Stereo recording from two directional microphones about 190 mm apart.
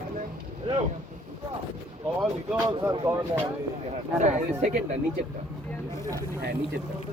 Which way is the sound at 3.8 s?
35° right (ahead or behind).